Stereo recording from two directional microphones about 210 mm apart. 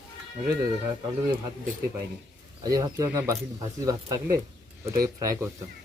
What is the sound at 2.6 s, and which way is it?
Speech, 15° right (ahead or behind).